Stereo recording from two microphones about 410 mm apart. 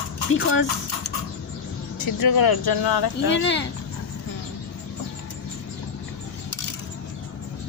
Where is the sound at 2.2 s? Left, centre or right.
Left.